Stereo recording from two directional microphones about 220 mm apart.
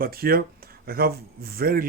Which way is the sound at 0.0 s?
45° right (ahead or behind).